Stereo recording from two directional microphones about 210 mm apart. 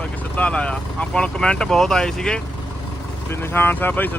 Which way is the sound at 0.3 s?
5° left (ahead or behind).